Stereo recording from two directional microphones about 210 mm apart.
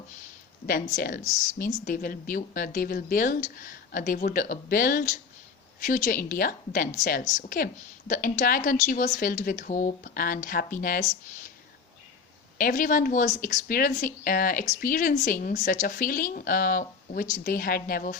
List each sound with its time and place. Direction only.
0.9 s a woman's voice: 45° left (ahead or behind)
12.5 s a woman's voice: 40° left (ahead or behind)